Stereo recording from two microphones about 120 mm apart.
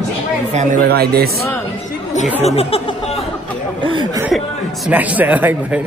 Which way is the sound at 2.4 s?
60° left (ahead or behind).